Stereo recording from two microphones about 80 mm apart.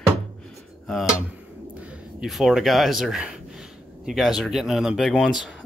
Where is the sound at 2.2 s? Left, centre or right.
Centre.